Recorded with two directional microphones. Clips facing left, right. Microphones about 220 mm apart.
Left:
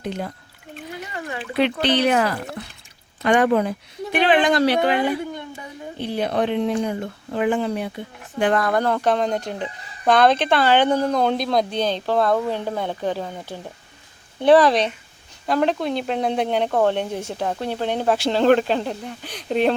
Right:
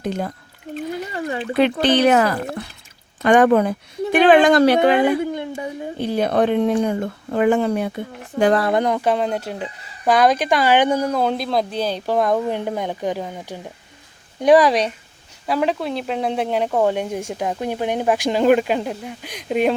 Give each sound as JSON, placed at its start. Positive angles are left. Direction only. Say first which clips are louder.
{"t": 0.0, "sound": "speech", "louder": "right 4 dB", "side_deg": -40}
{"t": 1.1, "sound": "speech", "louder": "right 2 dB", "side_deg": -30}
{"t": 1.5, "sound": "speech", "louder": "right 3 dB", "side_deg": -45}
{"t": 6.0, "sound": "speech", "louder": "right 4 dB", "side_deg": -45}
{"t": 8.8, "sound": "speech", "louder": "right 1 dB", "side_deg": -10}